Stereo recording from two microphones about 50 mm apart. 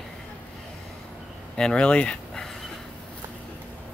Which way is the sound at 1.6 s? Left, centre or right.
Centre.